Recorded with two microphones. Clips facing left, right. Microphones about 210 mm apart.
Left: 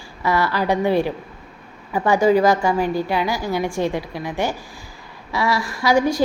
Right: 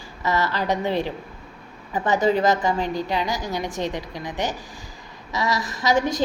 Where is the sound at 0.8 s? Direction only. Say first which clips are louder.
Left 5 dB; 15° left (ahead or behind).